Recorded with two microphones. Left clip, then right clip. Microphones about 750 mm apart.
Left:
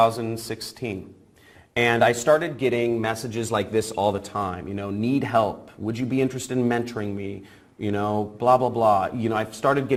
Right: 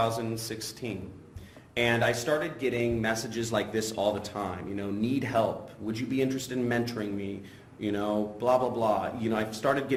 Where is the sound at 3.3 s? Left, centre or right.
Left.